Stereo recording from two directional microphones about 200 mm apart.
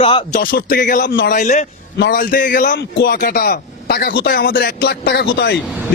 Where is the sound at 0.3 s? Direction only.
45° left (ahead or behind).